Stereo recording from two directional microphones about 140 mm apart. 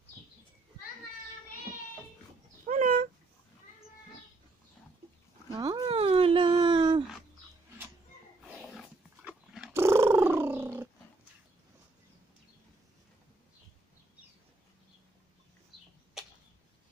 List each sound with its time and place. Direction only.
2.7 s dog: 80° right
5.5 s a sound: 35° right (ahead or behind)
8.5 s wild animals: centre (ahead or behind)
9.8 s purr: 20° right (ahead or behind)